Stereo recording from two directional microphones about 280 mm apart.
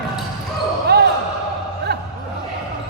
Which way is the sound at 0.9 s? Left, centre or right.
Right.